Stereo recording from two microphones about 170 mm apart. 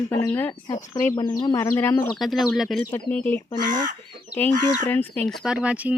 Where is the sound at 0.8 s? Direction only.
45° left (ahead or behind).